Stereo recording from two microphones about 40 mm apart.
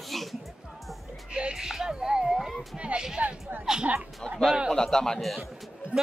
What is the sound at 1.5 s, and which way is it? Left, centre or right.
Speech, centre.